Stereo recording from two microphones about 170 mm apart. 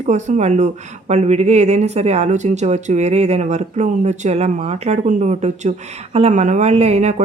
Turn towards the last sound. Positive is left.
turn(degrees=-40)  # may be behind; listen again after turning